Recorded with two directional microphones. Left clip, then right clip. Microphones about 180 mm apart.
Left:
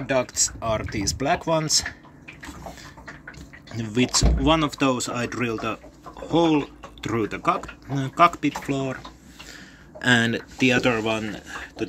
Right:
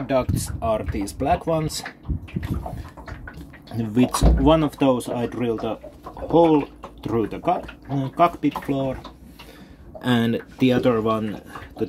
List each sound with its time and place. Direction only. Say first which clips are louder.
0.0 s speech: even; 10° right (ahead or behind)
3.7 s speech: right 1 dB; 30° right (ahead or behind); by 8.9 s 10° right (ahead or behind)
9.9 s speech: left 3 dB; 15° right (ahead or behind)